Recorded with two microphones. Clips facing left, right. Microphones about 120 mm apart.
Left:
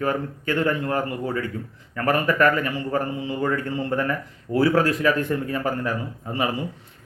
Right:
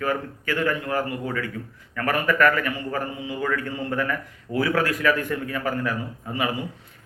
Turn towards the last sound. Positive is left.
turn(degrees=30)  # may be behind; listen again after turning